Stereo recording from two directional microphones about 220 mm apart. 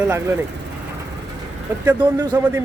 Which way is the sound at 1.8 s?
10° right (ahead or behind).